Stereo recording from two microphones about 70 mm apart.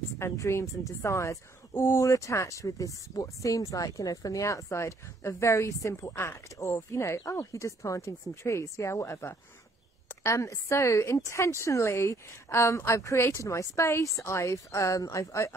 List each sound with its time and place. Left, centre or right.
0.2 s speech: left